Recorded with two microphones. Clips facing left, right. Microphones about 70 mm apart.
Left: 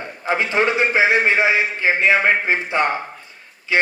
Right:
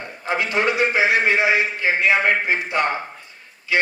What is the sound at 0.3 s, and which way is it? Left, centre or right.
A man's voice, left.